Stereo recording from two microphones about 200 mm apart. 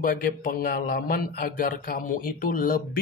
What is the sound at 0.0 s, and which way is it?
A man's voice, 45° left (ahead or behind).